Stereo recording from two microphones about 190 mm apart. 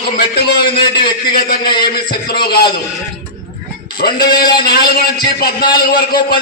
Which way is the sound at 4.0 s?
55° left (ahead or behind).